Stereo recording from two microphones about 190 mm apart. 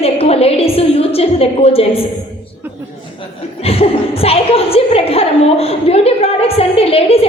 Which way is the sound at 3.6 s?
30° left (ahead or behind).